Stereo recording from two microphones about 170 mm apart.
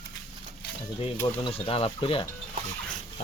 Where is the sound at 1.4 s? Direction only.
35° left (ahead or behind).